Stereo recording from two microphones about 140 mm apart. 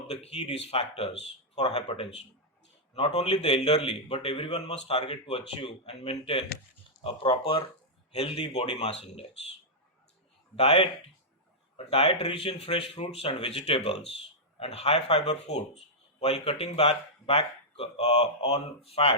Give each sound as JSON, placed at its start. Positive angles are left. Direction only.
{"t": 0.1, "sound": "a man's voice", "side_deg": 50}
{"t": 4.5, "sound": "a man's voice", "side_deg": 50}
{"t": 10.5, "sound": "speech", "side_deg": 45}
{"t": 11.9, "sound": "speech", "side_deg": 45}